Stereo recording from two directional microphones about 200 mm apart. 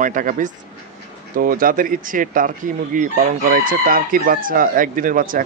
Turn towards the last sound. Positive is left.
turn(degrees=-45)  # may be behind; listen again after turning